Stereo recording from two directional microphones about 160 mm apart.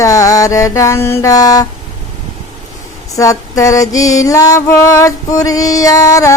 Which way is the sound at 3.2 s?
20° left (ahead or behind).